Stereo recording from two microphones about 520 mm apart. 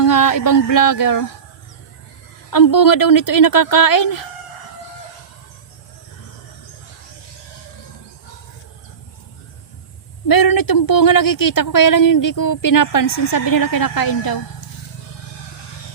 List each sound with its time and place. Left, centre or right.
0.0 s a woman's voice: left
2.5 s a woman's voice: left
10.2 s a woman's voice: left